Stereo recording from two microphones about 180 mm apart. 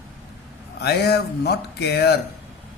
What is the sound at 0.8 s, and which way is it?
A man's voice, 65° left (ahead or behind).